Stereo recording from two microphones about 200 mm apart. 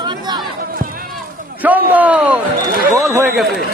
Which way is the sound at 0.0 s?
20° right (ahead or behind).